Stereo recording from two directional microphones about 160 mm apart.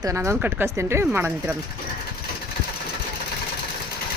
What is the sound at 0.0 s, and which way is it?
Speech, 20° right (ahead or behind).